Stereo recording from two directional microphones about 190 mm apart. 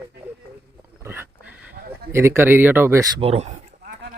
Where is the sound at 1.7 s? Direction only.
50° right (ahead or behind).